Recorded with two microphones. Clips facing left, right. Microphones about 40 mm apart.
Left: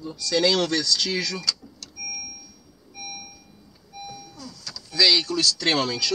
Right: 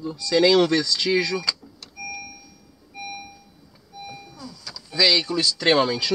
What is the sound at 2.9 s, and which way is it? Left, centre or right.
Doorbell, centre.